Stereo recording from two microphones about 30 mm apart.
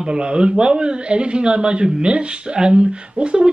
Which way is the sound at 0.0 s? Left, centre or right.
Right.